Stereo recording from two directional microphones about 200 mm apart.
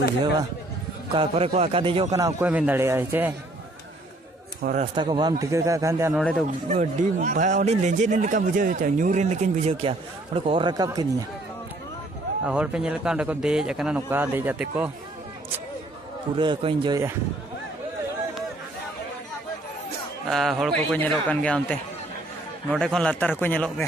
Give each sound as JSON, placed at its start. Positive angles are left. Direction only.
{"t": 1.1, "sound": "a man's voice", "side_deg": -30}
{"t": 2.1, "sound": "a man's voice", "side_deg": -10}
{"t": 4.6, "sound": "a man's voice", "side_deg": -45}
{"t": 4.9, "sound": "a man's voice", "side_deg": -25}
{"t": 6.1, "sound": "a man's voice", "side_deg": 0}
{"t": 6.7, "sound": "speech", "side_deg": -35}
{"t": 12.4, "sound": "a man's voice", "side_deg": -5}
{"t": 16.3, "sound": "a man's voice", "side_deg": -25}
{"t": 20.2, "sound": "a man's voice", "side_deg": 0}